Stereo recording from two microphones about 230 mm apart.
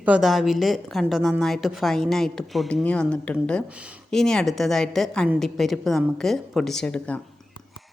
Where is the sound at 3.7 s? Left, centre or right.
Centre.